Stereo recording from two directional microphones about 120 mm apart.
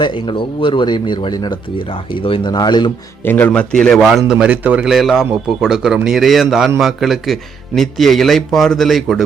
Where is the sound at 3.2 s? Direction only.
15° left (ahead or behind).